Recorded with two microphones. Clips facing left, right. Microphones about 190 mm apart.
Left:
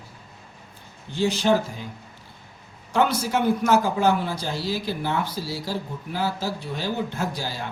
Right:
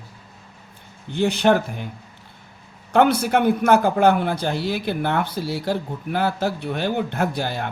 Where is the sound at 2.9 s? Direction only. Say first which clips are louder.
Right 5 dB; 60° right (ahead or behind).